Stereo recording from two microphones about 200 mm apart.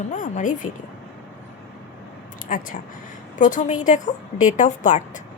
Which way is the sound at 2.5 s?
40° left (ahead or behind).